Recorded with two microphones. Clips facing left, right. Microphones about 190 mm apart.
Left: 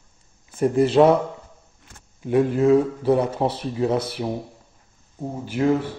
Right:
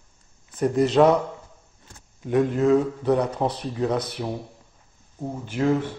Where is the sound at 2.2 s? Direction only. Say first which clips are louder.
Left 2 dB; 5° left (ahead or behind).